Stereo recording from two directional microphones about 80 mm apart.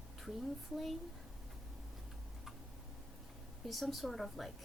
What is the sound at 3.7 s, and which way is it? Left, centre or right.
Speech, centre.